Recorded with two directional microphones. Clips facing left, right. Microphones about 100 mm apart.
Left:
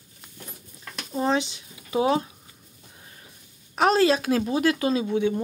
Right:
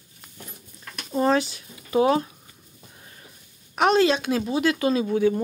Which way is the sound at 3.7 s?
35° left (ahead or behind).